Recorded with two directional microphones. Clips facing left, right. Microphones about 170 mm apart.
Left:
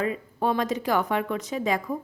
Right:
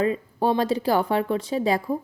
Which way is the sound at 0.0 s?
30° right (ahead or behind).